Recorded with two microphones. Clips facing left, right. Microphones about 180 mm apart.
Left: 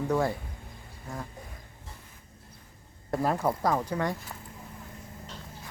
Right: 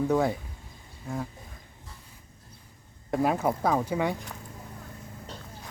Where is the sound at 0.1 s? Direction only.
5° right (ahead or behind).